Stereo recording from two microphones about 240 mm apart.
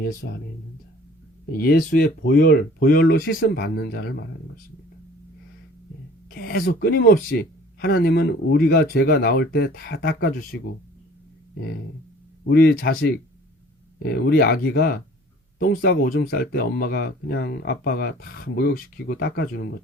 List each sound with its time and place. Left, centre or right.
1.5 s speech: left
6.3 s speech: left
12.5 s speech: left